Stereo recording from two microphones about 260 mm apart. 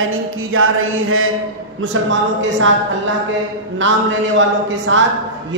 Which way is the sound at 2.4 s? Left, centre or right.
Right.